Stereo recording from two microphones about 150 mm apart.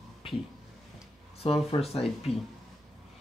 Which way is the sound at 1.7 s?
40° left (ahead or behind).